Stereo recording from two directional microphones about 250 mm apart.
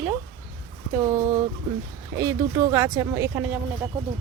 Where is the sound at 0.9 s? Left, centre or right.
Centre.